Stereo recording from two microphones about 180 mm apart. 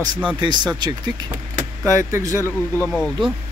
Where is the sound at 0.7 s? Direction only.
25° right (ahead or behind).